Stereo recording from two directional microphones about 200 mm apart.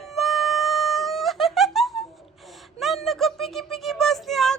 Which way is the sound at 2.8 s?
Centre (ahead or behind).